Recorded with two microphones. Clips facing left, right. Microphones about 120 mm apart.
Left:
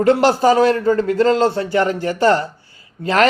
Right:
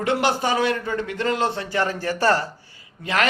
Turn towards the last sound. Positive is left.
turn(degrees=35)  # may be behind; listen again after turning